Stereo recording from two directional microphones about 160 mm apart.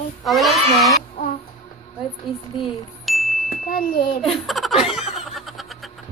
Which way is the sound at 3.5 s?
60° left (ahead or behind).